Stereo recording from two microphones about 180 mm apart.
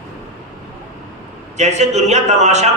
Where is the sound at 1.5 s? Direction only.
40° right (ahead or behind).